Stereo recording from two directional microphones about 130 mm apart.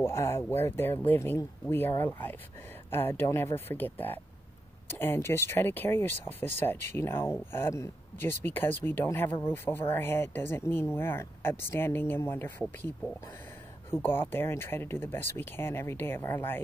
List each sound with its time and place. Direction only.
0.0 s speech: 20° left (ahead or behind)